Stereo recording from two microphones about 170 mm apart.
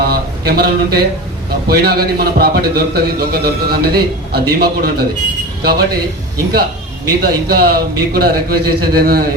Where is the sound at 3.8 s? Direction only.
65° right (ahead or behind).